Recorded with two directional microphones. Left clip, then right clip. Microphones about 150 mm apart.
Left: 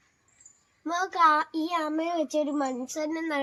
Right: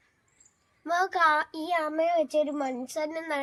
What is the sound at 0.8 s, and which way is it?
A child's voice, 45° right (ahead or behind).